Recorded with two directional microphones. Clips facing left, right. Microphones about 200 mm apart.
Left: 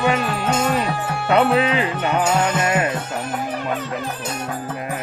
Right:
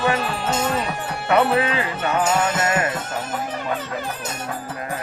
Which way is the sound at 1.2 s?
20° left (ahead or behind).